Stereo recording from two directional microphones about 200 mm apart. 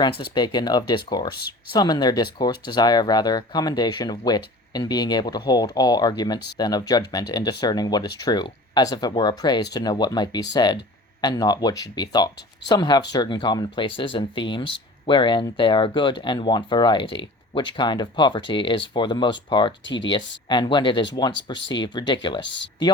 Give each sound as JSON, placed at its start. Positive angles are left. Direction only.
{"t": 0.0, "sound": "speech", "side_deg": 25}
{"t": 22.4, "sound": "speech", "side_deg": 65}